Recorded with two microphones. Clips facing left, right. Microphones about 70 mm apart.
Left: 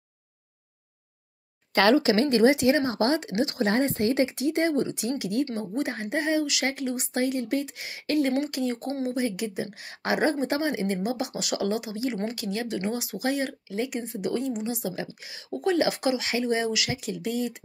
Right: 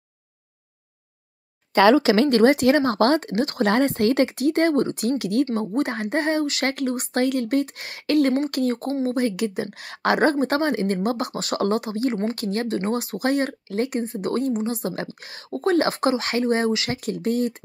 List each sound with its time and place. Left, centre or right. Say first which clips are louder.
2.0 s a woman's voice: right 4 dB; right
2.2 s a woman's voice: right 4 dB; right
6.6 s a woman's voice: right 4 dB; right
15.0 s a woman's voice: right 4 dB; right